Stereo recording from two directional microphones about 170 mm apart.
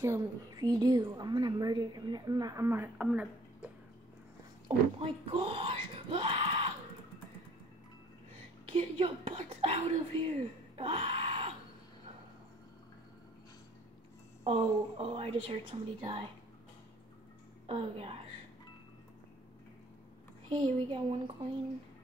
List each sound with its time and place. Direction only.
0.0 s a woman's voice: 15° right (ahead or behind)
4.6 s speech: 30° right (ahead or behind)
8.7 s a woman's voice: 30° right (ahead or behind)
10.8 s a sound: 35° right (ahead or behind)
14.4 s a woman's voice: 35° right (ahead or behind)
17.6 s a woman's voice: 35° right (ahead or behind)
20.4 s a woman's voice: 30° right (ahead or behind)